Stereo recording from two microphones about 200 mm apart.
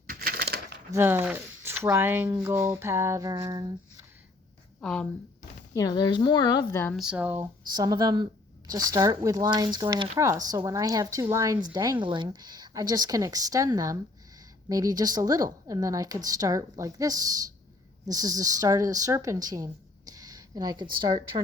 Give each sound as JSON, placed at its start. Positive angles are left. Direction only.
{"t": 0.1, "sound": "a sound", "side_deg": -50}
{"t": 0.9, "sound": "speech", "side_deg": -10}
{"t": 4.8, "sound": "a woman's voice", "side_deg": 5}
{"t": 5.7, "sound": "a woman's voice", "side_deg": 20}
{"t": 6.9, "sound": "speech", "side_deg": -5}
{"t": 7.7, "sound": "speech", "side_deg": -20}